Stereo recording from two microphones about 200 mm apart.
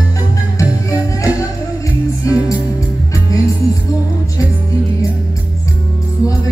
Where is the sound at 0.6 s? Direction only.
15° left (ahead or behind).